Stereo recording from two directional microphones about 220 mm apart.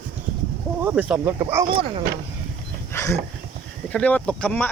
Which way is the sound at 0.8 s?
10° right (ahead or behind).